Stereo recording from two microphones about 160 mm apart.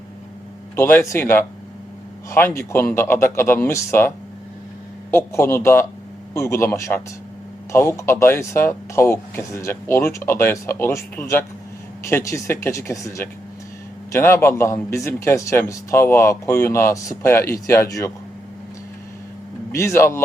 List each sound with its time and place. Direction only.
0.8 s a man's voice: 15° left (ahead or behind)
5.1 s a man's voice: 15° left (ahead or behind)
19.7 s a man's voice: 15° left (ahead or behind)